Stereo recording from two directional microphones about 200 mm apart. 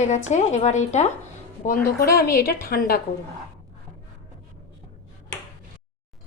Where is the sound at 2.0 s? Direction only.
50° left (ahead or behind).